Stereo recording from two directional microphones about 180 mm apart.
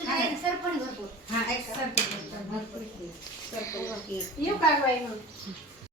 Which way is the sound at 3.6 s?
15° left (ahead or behind).